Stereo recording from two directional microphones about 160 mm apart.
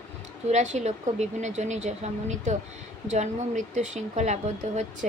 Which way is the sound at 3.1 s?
45° right (ahead or behind).